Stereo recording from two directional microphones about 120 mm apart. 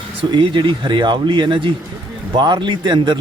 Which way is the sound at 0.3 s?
40° right (ahead or behind).